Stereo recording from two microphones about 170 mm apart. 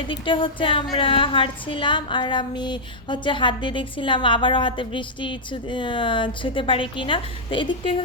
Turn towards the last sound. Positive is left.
turn(degrees=30)  # may be behind; listen again after turning